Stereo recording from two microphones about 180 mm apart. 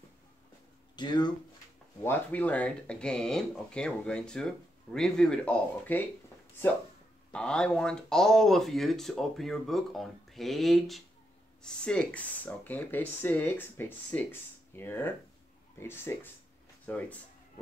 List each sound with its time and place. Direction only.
0.9 s speech: 25° left (ahead or behind)
2.0 s speech: 10° left (ahead or behind)
7.3 s speech: 5° left (ahead or behind)